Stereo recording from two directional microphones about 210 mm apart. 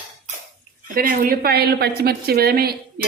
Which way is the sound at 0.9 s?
45° right (ahead or behind).